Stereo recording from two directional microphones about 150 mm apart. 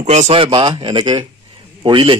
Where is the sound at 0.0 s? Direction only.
50° right (ahead or behind).